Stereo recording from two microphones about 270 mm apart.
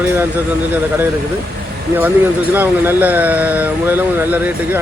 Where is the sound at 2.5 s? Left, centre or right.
Centre.